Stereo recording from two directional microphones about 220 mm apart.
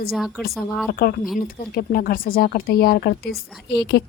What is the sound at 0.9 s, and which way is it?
Speech, 40° left (ahead or behind).